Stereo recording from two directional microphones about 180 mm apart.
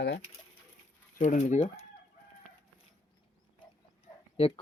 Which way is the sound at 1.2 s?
45° left (ahead or behind).